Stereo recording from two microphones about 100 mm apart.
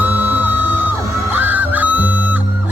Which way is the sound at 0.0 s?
20° right (ahead or behind).